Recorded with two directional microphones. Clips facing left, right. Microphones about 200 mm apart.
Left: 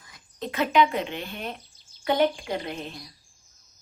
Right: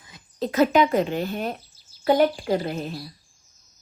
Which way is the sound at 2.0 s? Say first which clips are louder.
Right 4 dB; 40° right (ahead or behind).